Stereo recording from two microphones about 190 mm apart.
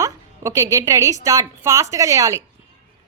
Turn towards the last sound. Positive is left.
turn(degrees=-15)  # may be behind; listen again after turning